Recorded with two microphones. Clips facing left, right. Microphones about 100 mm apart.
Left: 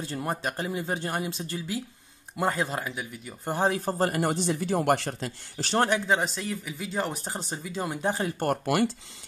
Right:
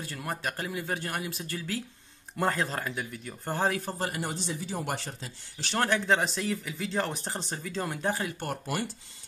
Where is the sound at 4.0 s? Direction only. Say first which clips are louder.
Left 7 dB; 50° left (ahead or behind).